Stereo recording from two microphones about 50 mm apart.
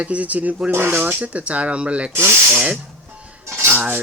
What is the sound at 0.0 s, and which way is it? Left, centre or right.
Speech, right.